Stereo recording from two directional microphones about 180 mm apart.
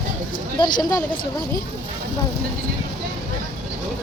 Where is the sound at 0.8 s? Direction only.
20° left (ahead or behind).